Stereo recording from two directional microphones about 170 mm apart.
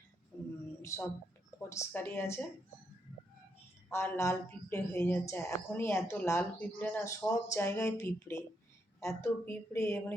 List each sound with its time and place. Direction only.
0.8 s a woman's voice: 15° left (ahead or behind)
3.8 s a woman's voice: 15° left (ahead or behind)